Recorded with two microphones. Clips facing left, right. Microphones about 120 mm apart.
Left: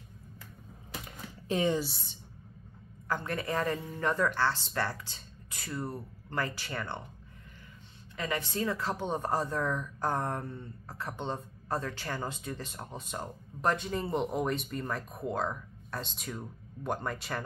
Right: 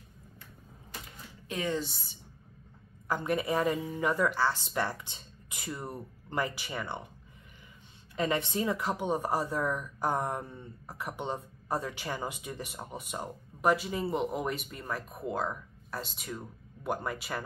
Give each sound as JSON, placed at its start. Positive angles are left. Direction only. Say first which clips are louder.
{"t": 1.5, "sound": "speech", "louder": "left 4 dB", "side_deg": 25}
{"t": 1.8, "sound": "speech", "louder": "left 1 dB", "side_deg": 0}
{"t": 3.1, "sound": "a woman's voice", "louder": "right 3 dB", "side_deg": -15}
{"t": 8.2, "sound": "a woman's voice", "louder": "right 3 dB", "side_deg": -20}